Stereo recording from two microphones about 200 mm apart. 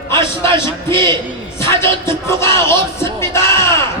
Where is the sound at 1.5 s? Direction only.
15° left (ahead or behind).